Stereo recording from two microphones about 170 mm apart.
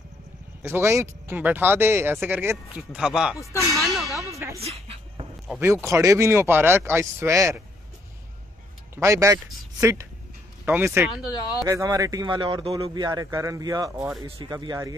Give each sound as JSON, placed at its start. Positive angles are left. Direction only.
{"t": 0.6, "sound": "speech", "side_deg": -15}
{"t": 4.2, "sound": "speech", "side_deg": -15}
{"t": 4.6, "sound": "a sound", "side_deg": -35}
{"t": 5.6, "sound": "speech", "side_deg": -15}
{"t": 8.9, "sound": "speech", "side_deg": -15}
{"t": 11.2, "sound": "speech", "side_deg": 25}
{"t": 11.6, "sound": "speech", "side_deg": -20}